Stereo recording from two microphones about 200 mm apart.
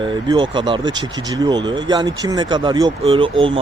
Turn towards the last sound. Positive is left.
turn(degrees=-25)  # may be behind; listen again after turning